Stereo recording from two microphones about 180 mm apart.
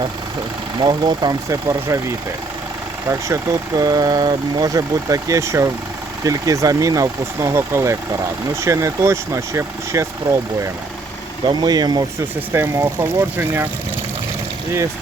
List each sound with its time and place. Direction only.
0.8 s speech: 25° right (ahead or behind)
11.4 s speech: 25° right (ahead or behind)